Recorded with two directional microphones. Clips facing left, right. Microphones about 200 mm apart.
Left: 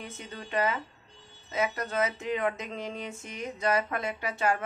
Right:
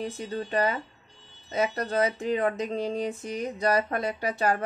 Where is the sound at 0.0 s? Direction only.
35° right (ahead or behind).